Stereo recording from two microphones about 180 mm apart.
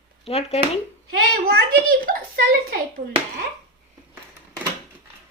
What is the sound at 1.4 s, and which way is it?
A child's voice, 55° right (ahead or behind).